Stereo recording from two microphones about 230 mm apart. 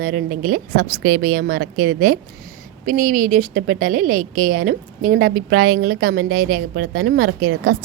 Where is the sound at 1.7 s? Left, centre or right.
Right.